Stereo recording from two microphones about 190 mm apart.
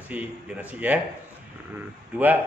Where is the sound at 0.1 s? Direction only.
5° right (ahead or behind).